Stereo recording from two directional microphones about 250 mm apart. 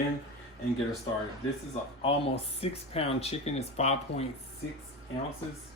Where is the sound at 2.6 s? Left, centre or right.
Left.